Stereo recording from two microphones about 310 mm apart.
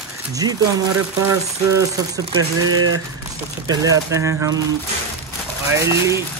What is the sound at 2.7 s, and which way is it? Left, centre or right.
Speech, right.